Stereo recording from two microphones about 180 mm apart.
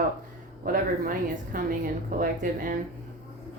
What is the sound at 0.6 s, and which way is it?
A woman's voice, 50° right (ahead or behind).